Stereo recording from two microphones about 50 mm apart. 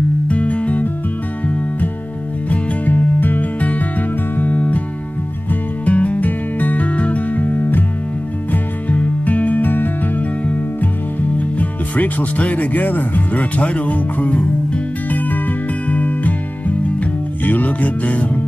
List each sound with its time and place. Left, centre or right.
0.3 s music: left
2.5 s music: left
8.8 s music: left
11.3 s speech: left
15.0 s music: left